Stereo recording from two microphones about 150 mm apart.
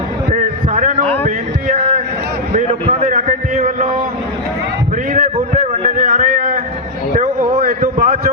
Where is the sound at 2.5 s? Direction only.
40° right (ahead or behind).